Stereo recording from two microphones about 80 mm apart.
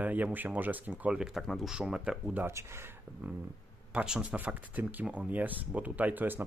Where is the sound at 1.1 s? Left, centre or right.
Centre.